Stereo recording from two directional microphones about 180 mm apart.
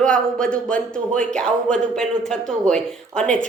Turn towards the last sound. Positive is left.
turn(degrees=5)  # may be behind; listen again after turning